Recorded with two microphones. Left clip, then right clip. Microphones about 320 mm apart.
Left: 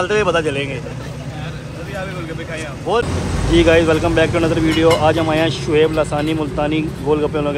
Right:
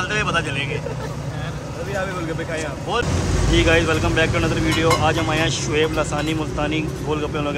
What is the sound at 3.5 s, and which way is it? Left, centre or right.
Speech, centre.